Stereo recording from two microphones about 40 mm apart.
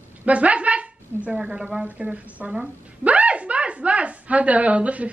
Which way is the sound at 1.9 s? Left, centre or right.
Right.